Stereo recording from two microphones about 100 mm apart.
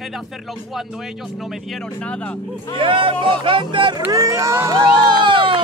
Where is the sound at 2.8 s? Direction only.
60° right (ahead or behind).